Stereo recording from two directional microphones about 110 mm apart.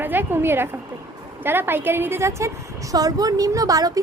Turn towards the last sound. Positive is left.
turn(degrees=-35)  # may be behind; listen again after turning